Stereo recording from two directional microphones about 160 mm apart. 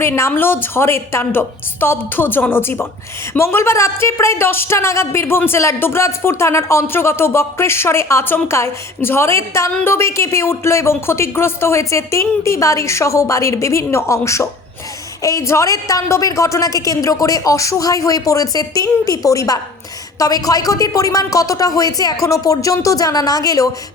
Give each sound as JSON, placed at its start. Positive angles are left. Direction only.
{"t": 0.0, "sound": "a woman's voice", "side_deg": 15}